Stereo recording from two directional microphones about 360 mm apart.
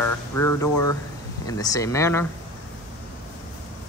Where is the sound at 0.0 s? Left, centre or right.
Centre.